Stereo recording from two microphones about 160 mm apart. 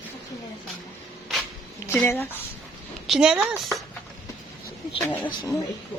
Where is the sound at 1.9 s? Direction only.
15° left (ahead or behind).